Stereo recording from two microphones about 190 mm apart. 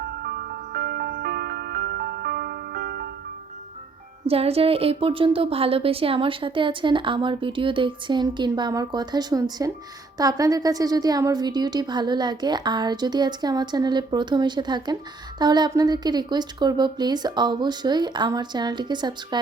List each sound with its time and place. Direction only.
0.2 s music: 55° right (ahead or behind)
4.3 s a woman's voice: 30° right (ahead or behind)